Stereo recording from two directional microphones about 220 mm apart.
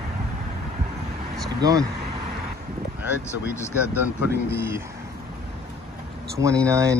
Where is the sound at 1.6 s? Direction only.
15° right (ahead or behind).